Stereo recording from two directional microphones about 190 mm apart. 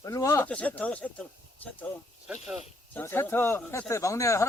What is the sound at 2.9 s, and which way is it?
Speech, 10° left (ahead or behind).